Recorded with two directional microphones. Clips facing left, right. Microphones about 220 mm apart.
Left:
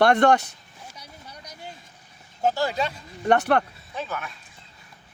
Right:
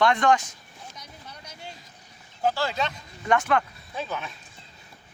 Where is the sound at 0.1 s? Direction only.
65° left (ahead or behind).